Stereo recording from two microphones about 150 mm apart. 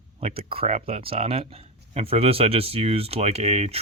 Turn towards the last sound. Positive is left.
turn(degrees=-45)  # may be behind; listen again after turning